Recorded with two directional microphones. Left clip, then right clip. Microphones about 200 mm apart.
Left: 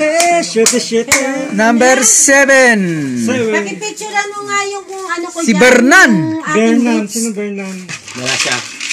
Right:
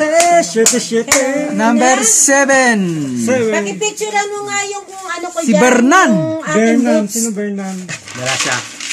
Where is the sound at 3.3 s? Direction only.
40° right (ahead or behind).